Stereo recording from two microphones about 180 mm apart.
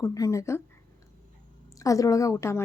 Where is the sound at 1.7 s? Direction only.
20° left (ahead or behind).